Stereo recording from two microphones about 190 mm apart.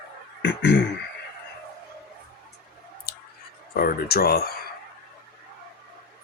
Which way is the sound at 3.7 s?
50° left (ahead or behind).